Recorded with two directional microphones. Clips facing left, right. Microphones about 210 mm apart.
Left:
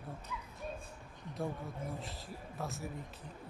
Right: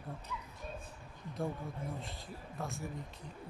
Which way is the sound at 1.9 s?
Centre (ahead or behind).